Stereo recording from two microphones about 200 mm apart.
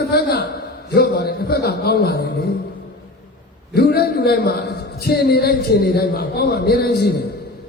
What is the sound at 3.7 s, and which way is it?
A man's voice, 55° left (ahead or behind).